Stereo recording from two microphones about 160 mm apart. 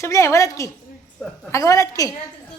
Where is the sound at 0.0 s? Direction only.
20° left (ahead or behind).